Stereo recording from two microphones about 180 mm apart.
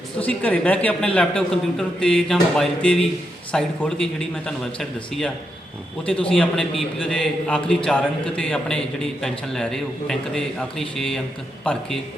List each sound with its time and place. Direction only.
0.3 s a man's voice: 10° left (ahead or behind)